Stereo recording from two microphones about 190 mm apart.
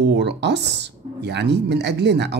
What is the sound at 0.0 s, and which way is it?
Speech, 65° right (ahead or behind).